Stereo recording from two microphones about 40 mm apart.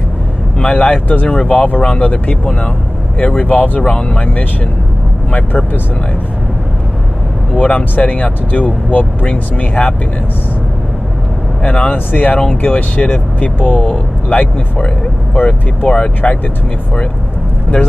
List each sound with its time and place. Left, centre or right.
0.7 s speech: left
3.8 s speech: left
5.3 s speech: left
7.5 s speech: left
11.6 s speech: left
11.9 s speech: left
16.2 s speech: left